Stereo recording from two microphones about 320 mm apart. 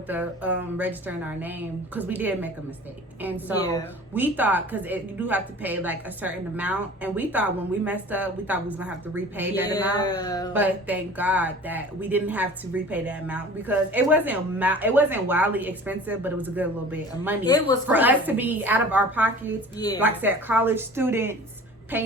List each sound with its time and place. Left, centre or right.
0.1 s speech: centre
10.0 s speech: centre
10.5 s speech: centre
17.4 s speech: centre
17.8 s a woman's voice: centre